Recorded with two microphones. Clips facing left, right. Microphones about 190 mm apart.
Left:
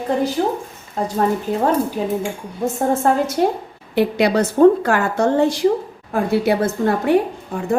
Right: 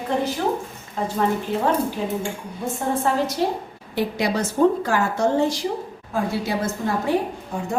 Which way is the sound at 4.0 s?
65° left (ahead or behind).